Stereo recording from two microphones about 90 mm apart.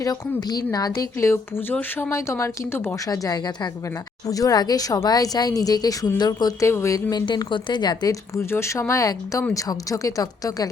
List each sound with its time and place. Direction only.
0.0 s a woman's voice: 45° left (ahead or behind); by 3.0 s 30° left (ahead or behind)
3.1 s speech: 45° left (ahead or behind)
6.7 s a woman's voice: 30° left (ahead or behind)
7.1 s speech: 50° left (ahead or behind)
8.4 s a woman's voice: 30° left (ahead or behind)